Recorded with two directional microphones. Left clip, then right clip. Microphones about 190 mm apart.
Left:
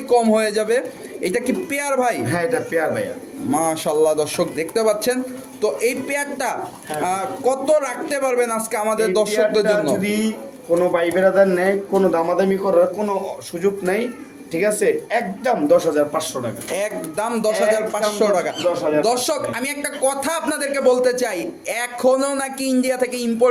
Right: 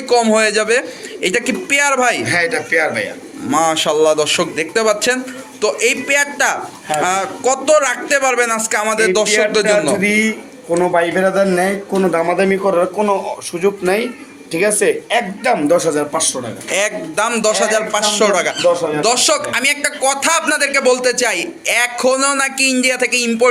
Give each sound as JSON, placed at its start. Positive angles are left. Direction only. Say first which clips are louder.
{"t": 0.1, "sound": "a man's voice", "louder": "right 4 dB", "side_deg": 0}
{"t": 2.2, "sound": "a man's voice", "louder": "right 5 dB", "side_deg": 50}
{"t": 3.5, "sound": "a man's voice", "louder": "right 5 dB", "side_deg": 0}
{"t": 10.0, "sound": "a man's voice", "louder": "right 8 dB", "side_deg": -35}
{"t": 10.8, "sound": "speech", "louder": "right 3 dB", "side_deg": -50}
{"t": 12.1, "sound": "a man's voice", "louder": "right 3 dB", "side_deg": -40}
{"t": 13.6, "sound": "speech", "louder": "right 4 dB", "side_deg": -25}
{"t": 15.7, "sound": "speech", "louder": "right 1 dB", "side_deg": -45}
{"t": 16.7, "sound": "a man's voice", "louder": "right 7 dB", "side_deg": 0}